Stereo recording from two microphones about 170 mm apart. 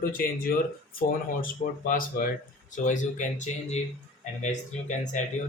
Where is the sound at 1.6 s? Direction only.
50° left (ahead or behind).